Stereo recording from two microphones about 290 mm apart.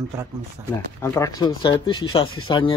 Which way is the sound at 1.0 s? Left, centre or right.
Centre.